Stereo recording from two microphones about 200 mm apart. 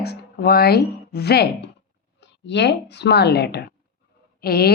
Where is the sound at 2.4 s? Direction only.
60° left (ahead or behind).